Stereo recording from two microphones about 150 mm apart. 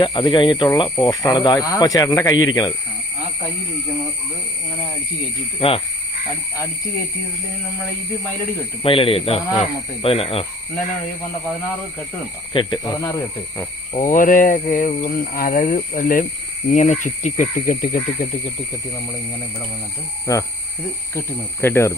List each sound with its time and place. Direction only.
0.0 s speech: 35° left (ahead or behind)
5.5 s speech: 40° left (ahead or behind)
8.8 s speech: 35° left (ahead or behind)
12.5 s speech: 25° left (ahead or behind)
13.9 s speech: 60° left (ahead or behind)
15.1 s speech: 75° left (ahead or behind)
16.6 s speech: 50° left (ahead or behind); by 18.3 s 70° left (ahead or behind)
20.3 s speech: 20° left (ahead or behind)